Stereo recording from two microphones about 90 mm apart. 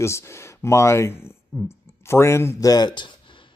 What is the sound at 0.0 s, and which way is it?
Speech, 30° left (ahead or behind).